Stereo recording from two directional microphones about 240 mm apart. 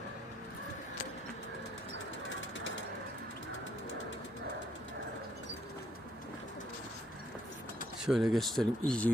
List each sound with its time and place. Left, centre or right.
8.0 s speech: centre